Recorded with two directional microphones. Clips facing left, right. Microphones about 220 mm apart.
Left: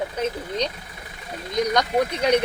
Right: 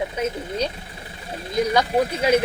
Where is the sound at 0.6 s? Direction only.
30° right (ahead or behind).